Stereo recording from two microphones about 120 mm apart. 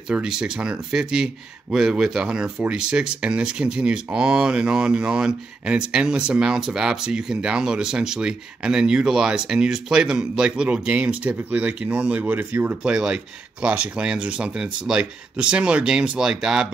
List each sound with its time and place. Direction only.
0.1 s speech: 5° right (ahead or behind)